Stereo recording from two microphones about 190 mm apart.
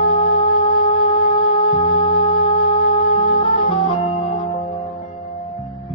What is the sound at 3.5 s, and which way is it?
Organ, 35° left (ahead or behind).